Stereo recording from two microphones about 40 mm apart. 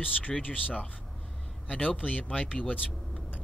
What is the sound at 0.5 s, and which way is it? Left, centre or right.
Speech, left.